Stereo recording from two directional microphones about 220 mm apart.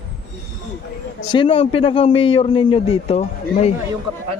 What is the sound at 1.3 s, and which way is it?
A man's voice, 25° left (ahead or behind).